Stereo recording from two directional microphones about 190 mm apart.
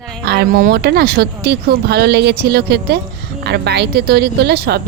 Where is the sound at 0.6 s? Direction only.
60° right (ahead or behind).